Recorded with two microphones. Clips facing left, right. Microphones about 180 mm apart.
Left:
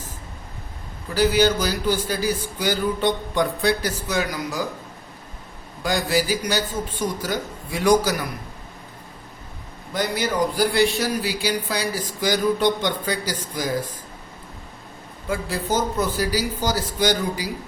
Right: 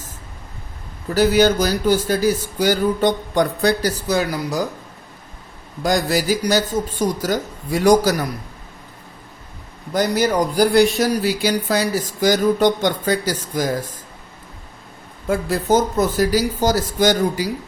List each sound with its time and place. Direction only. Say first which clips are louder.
1.1 s a man's voice: right 4 dB; 45° right (ahead or behind)
5.8 s speech: right 3 dB; 40° right (ahead or behind)
9.9 s a man's voice: right 6 dB; 45° right (ahead or behind)
15.3 s a man's voice: right 7 dB; 45° right (ahead or behind)